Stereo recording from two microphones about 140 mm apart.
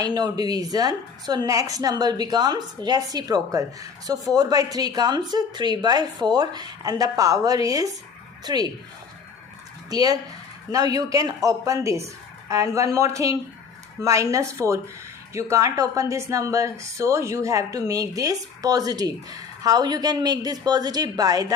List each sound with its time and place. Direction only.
0.0 s a woman's voice: 30° right (ahead or behind)
9.9 s a woman's voice: 25° right (ahead or behind)